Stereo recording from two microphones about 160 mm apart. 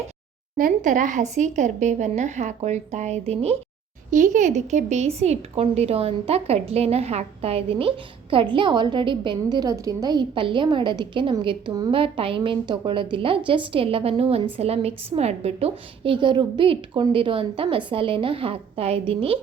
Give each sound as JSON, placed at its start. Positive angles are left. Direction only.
{"t": 0.5, "sound": "a woman's voice", "side_deg": -55}
{"t": 4.1, "sound": "a woman's voice", "side_deg": -55}